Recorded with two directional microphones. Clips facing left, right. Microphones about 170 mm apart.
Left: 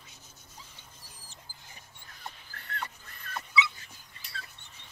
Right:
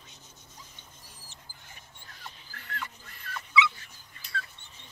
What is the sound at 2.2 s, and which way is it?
Dog, 35° left (ahead or behind).